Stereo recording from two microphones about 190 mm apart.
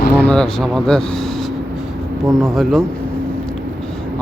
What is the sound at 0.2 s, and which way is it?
Speech, 5° left (ahead or behind).